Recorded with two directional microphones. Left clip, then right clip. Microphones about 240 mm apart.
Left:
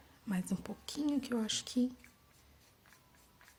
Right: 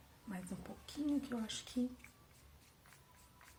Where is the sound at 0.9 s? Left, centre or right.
Left.